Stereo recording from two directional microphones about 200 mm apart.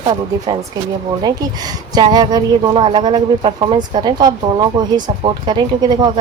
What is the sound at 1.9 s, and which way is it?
Speech, 20° right (ahead or behind).